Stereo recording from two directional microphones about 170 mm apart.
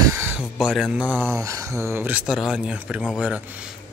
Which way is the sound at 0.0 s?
15° right (ahead or behind).